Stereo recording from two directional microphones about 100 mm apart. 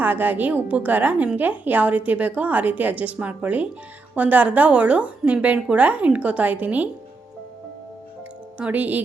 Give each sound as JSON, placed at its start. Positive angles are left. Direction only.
{"t": 0.0, "sound": "a woman's voice", "side_deg": -15}
{"t": 8.5, "sound": "a woman's voice", "side_deg": -15}